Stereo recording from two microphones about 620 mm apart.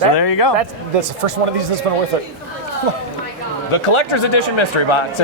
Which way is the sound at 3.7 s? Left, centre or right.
Left.